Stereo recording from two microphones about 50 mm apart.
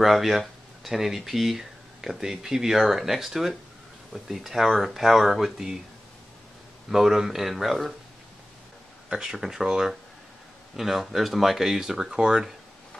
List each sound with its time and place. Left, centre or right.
0.0 s speech: centre
6.9 s speech: centre
9.1 s speech: centre
12.2 s speech: centre